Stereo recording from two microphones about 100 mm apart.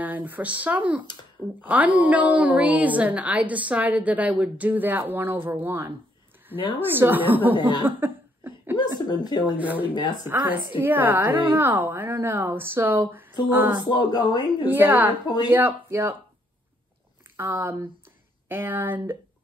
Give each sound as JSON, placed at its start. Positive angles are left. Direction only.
{"t": 0.0, "sound": "a woman's voice", "side_deg": -15}
{"t": 7.0, "sound": "a woman's voice", "side_deg": -20}
{"t": 8.0, "sound": "cough", "side_deg": -20}
{"t": 8.7, "sound": "a sound", "side_deg": 45}
{"t": 9.6, "sound": "a woman's voice", "side_deg": -15}
{"t": 13.8, "sound": "speech", "side_deg": 45}
{"t": 14.6, "sound": "a woman's voice", "side_deg": -20}
{"t": 15.2, "sound": "speech", "side_deg": 45}
{"t": 15.5, "sound": "a woman's voice", "side_deg": -20}
{"t": 17.4, "sound": "a woman's voice", "side_deg": -20}